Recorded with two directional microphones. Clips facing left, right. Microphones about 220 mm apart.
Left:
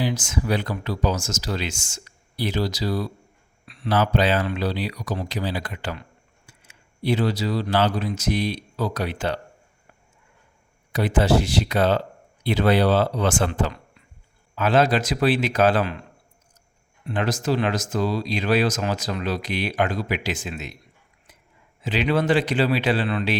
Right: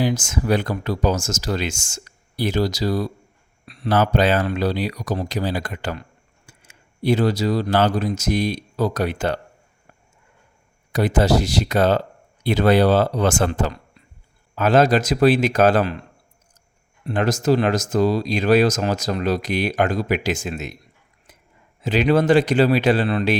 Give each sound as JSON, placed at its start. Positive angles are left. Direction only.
{"t": 0.0, "sound": "speech", "side_deg": -45}
{"t": 10.9, "sound": "speech", "side_deg": -40}
{"t": 17.1, "sound": "speech", "side_deg": -45}
{"t": 21.8, "sound": "speech", "side_deg": -45}